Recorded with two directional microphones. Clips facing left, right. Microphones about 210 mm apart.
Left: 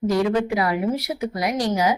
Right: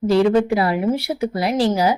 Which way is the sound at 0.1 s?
30° right (ahead or behind).